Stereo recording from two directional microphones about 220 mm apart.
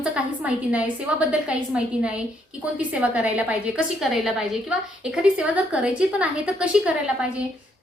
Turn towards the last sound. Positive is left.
turn(degrees=-5)  # may be behind; listen again after turning